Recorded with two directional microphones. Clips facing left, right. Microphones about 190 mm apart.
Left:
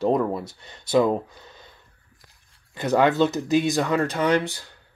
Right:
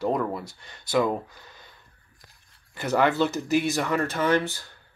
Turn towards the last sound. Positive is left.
turn(degrees=15)  # may be behind; listen again after turning